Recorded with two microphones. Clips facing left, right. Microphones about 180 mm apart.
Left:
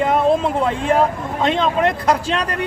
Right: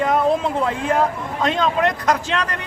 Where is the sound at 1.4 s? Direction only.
25° left (ahead or behind).